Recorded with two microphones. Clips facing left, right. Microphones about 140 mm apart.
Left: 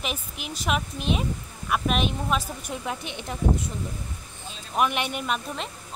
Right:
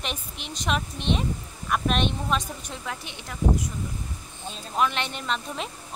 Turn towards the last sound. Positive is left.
turn(degrees=10)  # may be behind; listen again after turning